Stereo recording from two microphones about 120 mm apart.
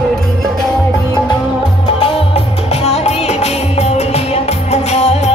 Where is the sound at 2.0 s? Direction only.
55° left (ahead or behind).